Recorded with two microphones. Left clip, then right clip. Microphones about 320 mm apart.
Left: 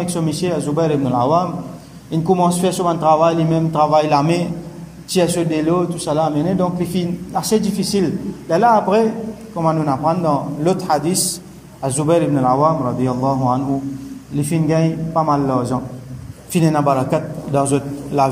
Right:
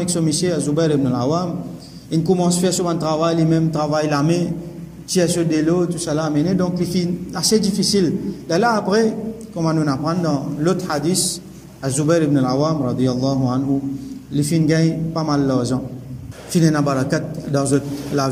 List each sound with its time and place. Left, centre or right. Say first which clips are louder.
0.0 s a man's voice: right 1 dB; centre
14.3 s a man's voice: even; centre